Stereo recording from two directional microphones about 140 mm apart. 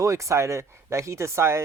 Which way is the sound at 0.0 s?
20° right (ahead or behind).